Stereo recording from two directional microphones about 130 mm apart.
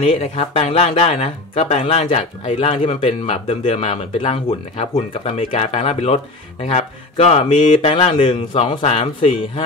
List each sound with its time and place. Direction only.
0.0 s speech: 50° left (ahead or behind)